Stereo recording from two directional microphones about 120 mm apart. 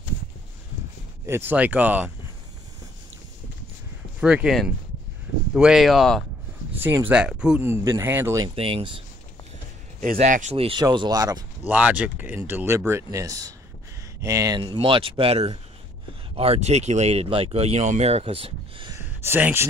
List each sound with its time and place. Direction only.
1.2 s speech: 20° right (ahead or behind)
4.2 s speech: 5° right (ahead or behind)
6.7 s speech: 15° right (ahead or behind)
7.6 s speech: 20° right (ahead or behind)
8.5 s speech: 50° right (ahead or behind)
9.9 s speech: 90° right
10.5 s speech: 55° right (ahead or behind)
10.8 s speech: 35° right (ahead or behind)
11.6 s speech: 15° right (ahead or behind)
14.6 s speech: 45° right (ahead or behind)
18.9 s a sound: 20° right (ahead or behind)